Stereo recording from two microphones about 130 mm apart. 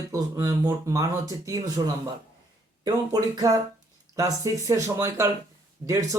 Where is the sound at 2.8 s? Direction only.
30° right (ahead or behind).